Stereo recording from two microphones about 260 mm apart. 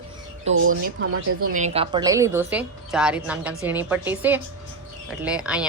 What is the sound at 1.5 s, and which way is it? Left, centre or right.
A woman's voice, right.